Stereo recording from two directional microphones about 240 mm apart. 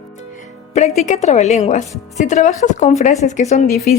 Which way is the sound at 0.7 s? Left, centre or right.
Left.